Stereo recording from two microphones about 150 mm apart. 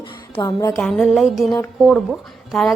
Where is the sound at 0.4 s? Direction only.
25° left (ahead or behind).